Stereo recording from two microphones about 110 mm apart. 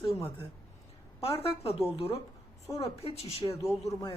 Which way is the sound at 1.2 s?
60° left (ahead or behind).